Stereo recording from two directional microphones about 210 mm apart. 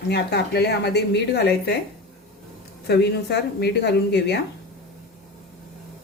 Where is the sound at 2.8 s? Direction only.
50° left (ahead or behind).